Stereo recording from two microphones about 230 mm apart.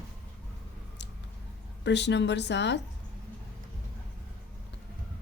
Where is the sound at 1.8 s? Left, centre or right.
Left.